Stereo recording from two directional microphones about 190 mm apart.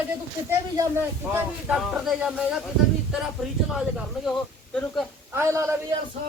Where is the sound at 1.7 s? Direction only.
Centre (ahead or behind).